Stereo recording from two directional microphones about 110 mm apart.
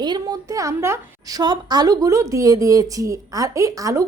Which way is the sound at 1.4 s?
35° right (ahead or behind).